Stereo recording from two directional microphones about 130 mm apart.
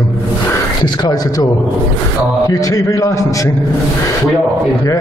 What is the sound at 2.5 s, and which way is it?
A man's voice, 25° left (ahead or behind).